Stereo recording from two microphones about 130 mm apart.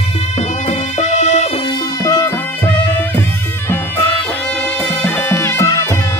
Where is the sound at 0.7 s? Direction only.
65° left (ahead or behind).